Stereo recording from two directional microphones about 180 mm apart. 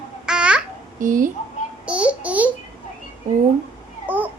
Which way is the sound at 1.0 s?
50° right (ahead or behind).